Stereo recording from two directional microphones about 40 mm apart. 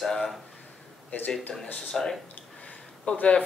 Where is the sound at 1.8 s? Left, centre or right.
Centre.